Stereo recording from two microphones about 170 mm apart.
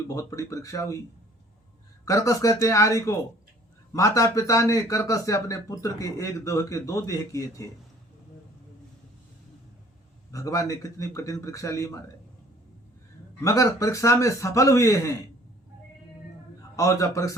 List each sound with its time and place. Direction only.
0.1 s speech: 20° left (ahead or behind)
2.0 s speech: 20° left (ahead or behind)
10.3 s speech: 20° left (ahead or behind)
13.4 s speech: 20° left (ahead or behind)
16.7 s speech: 20° left (ahead or behind)